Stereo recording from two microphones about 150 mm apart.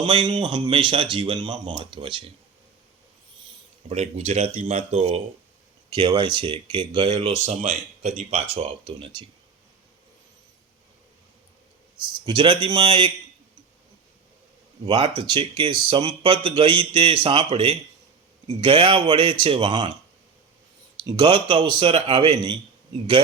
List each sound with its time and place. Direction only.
0.0 s speech: 30° right (ahead or behind)
3.8 s speech: 45° right (ahead or behind)
5.9 s speech: 35° right (ahead or behind)
7.6 s speech: 55° right (ahead or behind)
8.9 s speech: 35° right (ahead or behind)
11.9 s speech: 30° right (ahead or behind)
14.8 s speech: 40° right (ahead or behind)
21.2 s speech: 35° right (ahead or behind)